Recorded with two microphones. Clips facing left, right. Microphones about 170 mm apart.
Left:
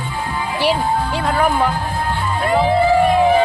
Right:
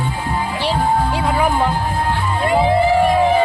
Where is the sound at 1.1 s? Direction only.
10° right (ahead or behind).